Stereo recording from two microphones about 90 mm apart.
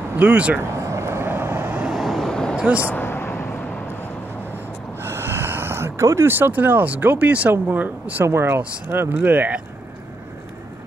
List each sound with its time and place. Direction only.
0.2 s speech: 15° right (ahead or behind)
0.6 s vehicle: 35° right (ahead or behind)
1.9 s vehicle: centre (ahead or behind)
2.5 s a sound: 10° right (ahead or behind)
2.8 s vehicle: 25° left (ahead or behind)
5.0 s speech: 25° right (ahead or behind)